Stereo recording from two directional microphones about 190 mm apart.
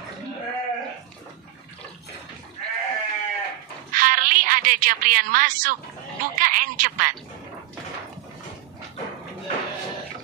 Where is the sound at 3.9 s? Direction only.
45° right (ahead or behind).